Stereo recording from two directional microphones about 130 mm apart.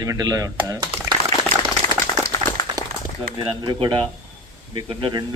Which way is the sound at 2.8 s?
30° right (ahead or behind).